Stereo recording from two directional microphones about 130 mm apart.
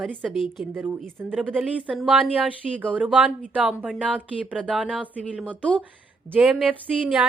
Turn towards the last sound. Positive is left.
turn(degrees=-10)  # may be behind; listen again after turning